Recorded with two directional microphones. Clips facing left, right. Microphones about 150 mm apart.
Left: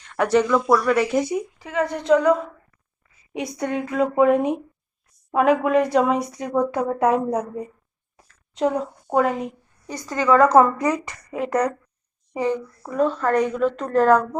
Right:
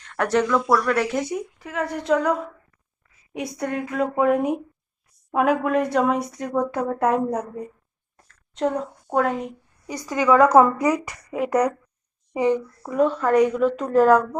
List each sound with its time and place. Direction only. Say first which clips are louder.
0.0 s speech: left 2 dB; centre (ahead or behind)
8.1 s a sound: left 1 dB; centre (ahead or behind)
9.1 s a woman's voice: left 2 dB; centre (ahead or behind)
9.9 s a woman's voice: even; 10° right (ahead or behind)